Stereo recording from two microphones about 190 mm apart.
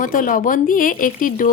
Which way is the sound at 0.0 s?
45° left (ahead or behind).